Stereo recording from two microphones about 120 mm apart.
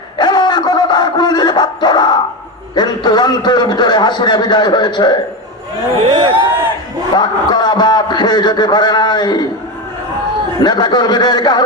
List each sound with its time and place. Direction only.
0.2 s a sound: 35° left (ahead or behind)
2.7 s a man's voice: 35° left (ahead or behind)
6.1 s speech: 45° right (ahead or behind)
7.2 s a man's voice: 35° left (ahead or behind)
10.6 s a man's voice: 35° left (ahead or behind)